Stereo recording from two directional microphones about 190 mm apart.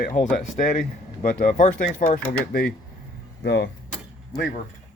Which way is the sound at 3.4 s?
65° left (ahead or behind).